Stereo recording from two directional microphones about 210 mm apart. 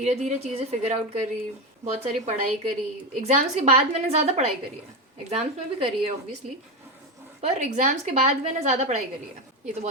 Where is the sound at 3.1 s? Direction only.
35° right (ahead or behind).